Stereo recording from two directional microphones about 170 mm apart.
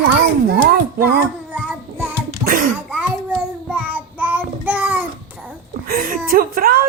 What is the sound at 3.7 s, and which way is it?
Child singing, 10° right (ahead or behind).